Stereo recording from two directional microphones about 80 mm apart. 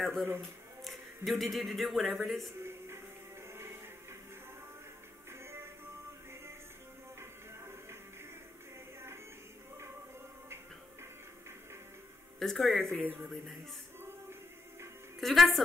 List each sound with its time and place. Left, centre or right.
0.0 s a man's voice: centre
3.4 s music: right
5.3 s music: right
7.2 s music: right
12.4 s speech: centre
15.1 s speech: centre